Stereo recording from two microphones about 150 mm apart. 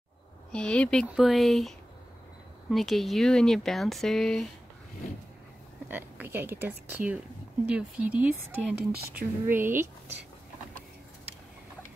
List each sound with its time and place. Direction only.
0.5 s speech: 5° left (ahead or behind)
2.7 s speech: centre (ahead or behind)
5.9 s a woman's voice: 15° right (ahead or behind)